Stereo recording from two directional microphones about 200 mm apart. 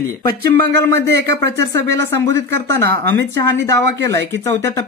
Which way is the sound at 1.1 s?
60° right (ahead or behind).